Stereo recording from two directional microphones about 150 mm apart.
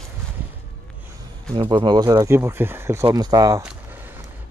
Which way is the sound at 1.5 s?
30° right (ahead or behind).